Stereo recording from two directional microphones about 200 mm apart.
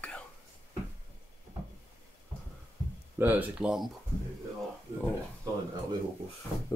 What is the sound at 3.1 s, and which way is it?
Speech, 10° right (ahead or behind).